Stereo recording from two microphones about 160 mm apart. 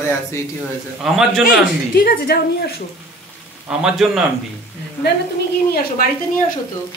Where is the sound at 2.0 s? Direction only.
65° left (ahead or behind).